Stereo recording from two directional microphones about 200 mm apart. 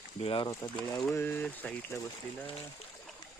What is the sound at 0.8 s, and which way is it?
Speech, 5° left (ahead or behind).